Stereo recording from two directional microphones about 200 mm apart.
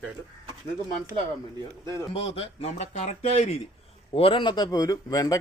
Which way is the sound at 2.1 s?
30° left (ahead or behind).